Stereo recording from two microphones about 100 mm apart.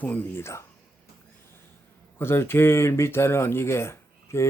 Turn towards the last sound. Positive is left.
turn(degrees=25)  # may be behind; listen again after turning